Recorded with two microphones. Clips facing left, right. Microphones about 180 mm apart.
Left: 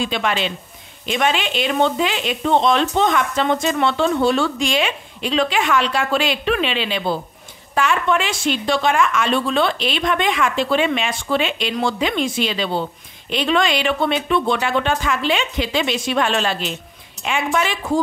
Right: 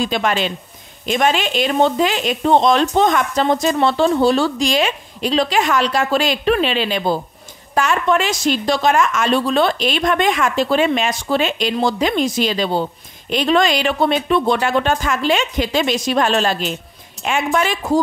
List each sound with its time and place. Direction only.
0.0 s speech: 40° right (ahead or behind)